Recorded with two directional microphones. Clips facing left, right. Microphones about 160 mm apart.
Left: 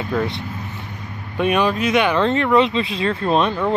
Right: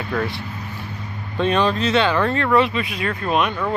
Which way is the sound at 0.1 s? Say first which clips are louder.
Left 2 dB; 20° left (ahead or behind).